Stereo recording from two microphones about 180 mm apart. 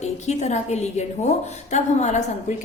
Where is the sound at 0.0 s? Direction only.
40° left (ahead or behind).